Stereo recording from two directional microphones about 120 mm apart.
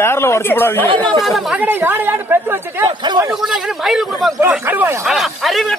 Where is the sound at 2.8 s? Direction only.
40° right (ahead or behind).